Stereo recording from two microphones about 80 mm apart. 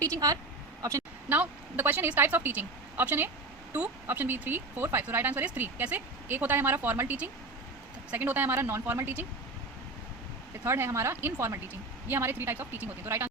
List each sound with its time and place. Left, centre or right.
0.0 s a sound: right
1.3 s speech: right
10.6 s speech: right